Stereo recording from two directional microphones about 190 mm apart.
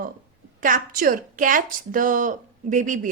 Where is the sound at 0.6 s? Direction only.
45° right (ahead or behind).